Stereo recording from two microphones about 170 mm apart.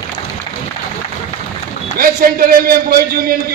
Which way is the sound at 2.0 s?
60° right (ahead or behind).